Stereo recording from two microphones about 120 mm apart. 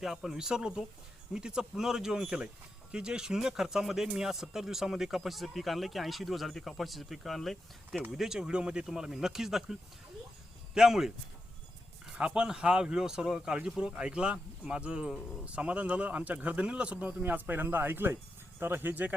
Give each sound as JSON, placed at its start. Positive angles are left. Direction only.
{"t": 0.0, "sound": "speech", "side_deg": -5}
{"t": 10.8, "sound": "speech", "side_deg": -5}